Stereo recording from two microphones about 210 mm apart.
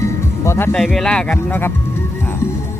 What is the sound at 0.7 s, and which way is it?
Speech, centre (ahead or behind).